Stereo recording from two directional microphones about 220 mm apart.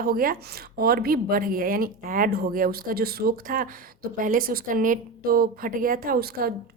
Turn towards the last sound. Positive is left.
turn(degrees=-45)  # may be behind; listen again after turning